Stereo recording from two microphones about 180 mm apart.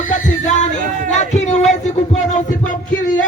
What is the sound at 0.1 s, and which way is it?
Music, 40° left (ahead or behind).